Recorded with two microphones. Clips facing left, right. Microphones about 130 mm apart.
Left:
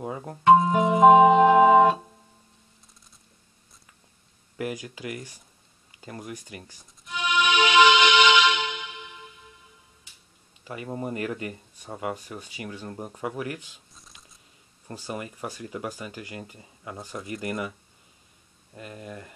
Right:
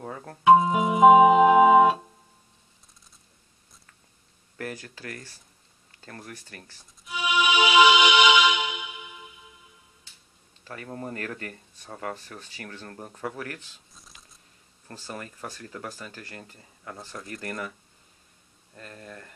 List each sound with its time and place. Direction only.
0.0 s speech: 15° left (ahead or behind)
0.4 s organ: 5° right (ahead or behind)
4.6 s speech: 10° left (ahead or behind)
7.1 s music: 5° right (ahead or behind)
10.6 s speech: 10° left (ahead or behind)
13.9 s a sound: centre (ahead or behind)
14.9 s speech: 15° left (ahead or behind)
18.8 s speech: 10° left (ahead or behind)